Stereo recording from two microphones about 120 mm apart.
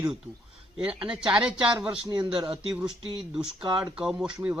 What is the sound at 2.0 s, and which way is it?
Speech, 40° right (ahead or behind).